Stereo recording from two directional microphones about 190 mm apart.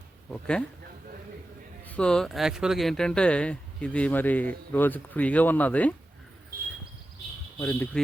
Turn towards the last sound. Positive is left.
turn(degrees=10)  # may be behind; listen again after turning